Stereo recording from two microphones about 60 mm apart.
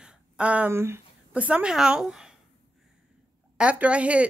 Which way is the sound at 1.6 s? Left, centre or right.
Centre.